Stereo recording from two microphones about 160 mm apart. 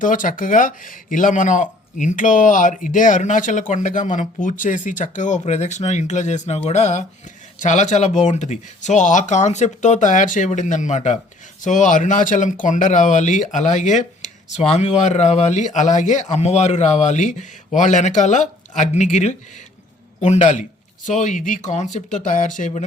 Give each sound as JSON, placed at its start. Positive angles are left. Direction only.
{"t": 0.0, "sound": "speech", "side_deg": 55}